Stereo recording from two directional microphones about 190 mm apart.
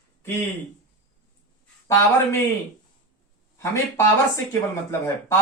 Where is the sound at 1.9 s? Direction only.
15° left (ahead or behind).